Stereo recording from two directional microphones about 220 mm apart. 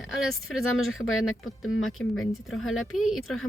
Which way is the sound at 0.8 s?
70° left (ahead or behind).